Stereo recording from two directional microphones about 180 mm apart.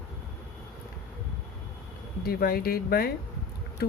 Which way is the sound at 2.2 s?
55° left (ahead or behind).